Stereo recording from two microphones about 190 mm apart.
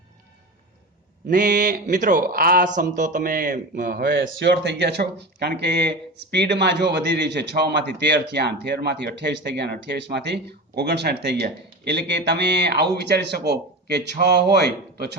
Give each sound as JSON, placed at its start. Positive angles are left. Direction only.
{"t": 1.3, "sound": "a man's voice", "side_deg": -45}
{"t": 4.0, "sound": "speech", "side_deg": -70}